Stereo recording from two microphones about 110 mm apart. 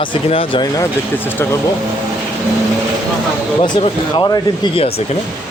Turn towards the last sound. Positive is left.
turn(degrees=35)  # may be behind; listen again after turning